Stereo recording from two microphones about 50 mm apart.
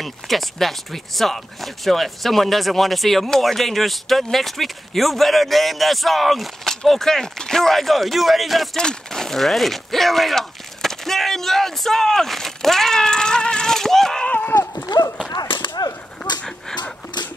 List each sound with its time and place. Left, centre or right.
0.0 s speech: centre
8.7 s speech: centre
14.3 s a sound: left